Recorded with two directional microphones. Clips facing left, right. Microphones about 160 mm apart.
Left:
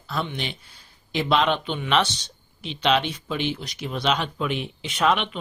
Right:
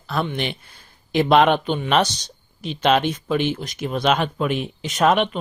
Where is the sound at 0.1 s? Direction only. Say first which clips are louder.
Right 5 dB; 55° right (ahead or behind).